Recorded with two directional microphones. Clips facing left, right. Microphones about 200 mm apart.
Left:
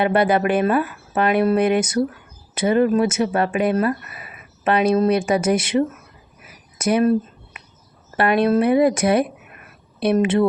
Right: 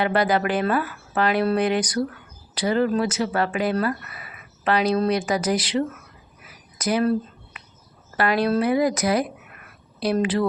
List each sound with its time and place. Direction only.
0.0 s speech: 25° left (ahead or behind)
6.7 s a sound: 25° left (ahead or behind)
8.1 s speech: 25° left (ahead or behind)